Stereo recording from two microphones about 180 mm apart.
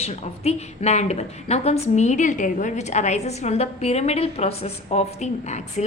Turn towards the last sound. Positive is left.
turn(degrees=40)  # may be behind; listen again after turning